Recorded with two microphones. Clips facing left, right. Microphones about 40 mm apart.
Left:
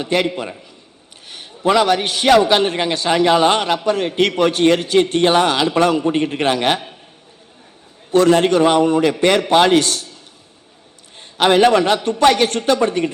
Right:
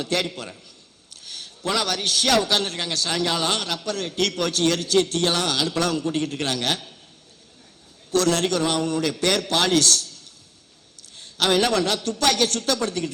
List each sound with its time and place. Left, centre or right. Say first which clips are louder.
0.0 s a man's voice: left 7 dB; left
8.1 s a man's voice: left 8 dB; left
11.2 s a man's voice: left 8 dB; left